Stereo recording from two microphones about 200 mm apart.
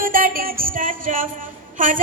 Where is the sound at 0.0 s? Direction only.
45° right (ahead or behind).